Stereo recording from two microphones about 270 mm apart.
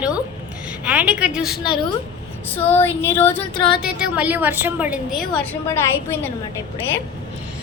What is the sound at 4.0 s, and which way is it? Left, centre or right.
A woman's voice, centre.